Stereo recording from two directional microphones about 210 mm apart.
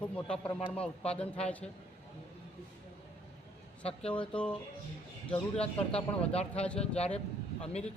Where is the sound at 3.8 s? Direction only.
30° left (ahead or behind).